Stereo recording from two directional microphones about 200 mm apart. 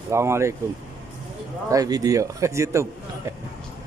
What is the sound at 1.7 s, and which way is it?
A man's voice, 20° right (ahead or behind).